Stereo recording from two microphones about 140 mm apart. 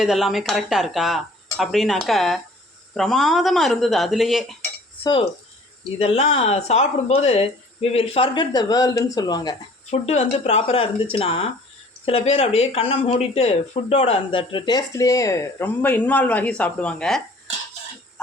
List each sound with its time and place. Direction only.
0.0 s speech: centre (ahead or behind)
6.0 s speech: 50° left (ahead or behind); by 9.6 s 30° left (ahead or behind)
9.9 s speech: 50° left (ahead or behind); by 17.2 s 5° left (ahead or behind)